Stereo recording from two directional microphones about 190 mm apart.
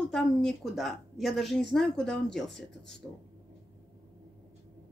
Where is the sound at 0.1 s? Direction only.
Centre (ahead or behind).